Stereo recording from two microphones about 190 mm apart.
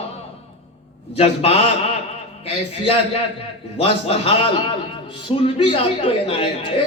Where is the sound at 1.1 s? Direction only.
30° left (ahead or behind).